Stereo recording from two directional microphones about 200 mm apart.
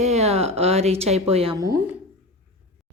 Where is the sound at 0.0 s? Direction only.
35° right (ahead or behind).